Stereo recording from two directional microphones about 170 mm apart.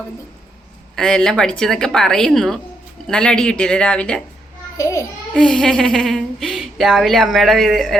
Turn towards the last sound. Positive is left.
turn(degrees=0)  # may be behind; listen again after turning